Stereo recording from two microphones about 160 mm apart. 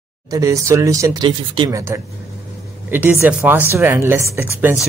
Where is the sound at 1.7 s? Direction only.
15° right (ahead or behind).